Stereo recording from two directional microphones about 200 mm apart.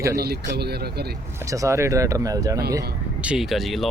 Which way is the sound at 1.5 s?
15° right (ahead or behind).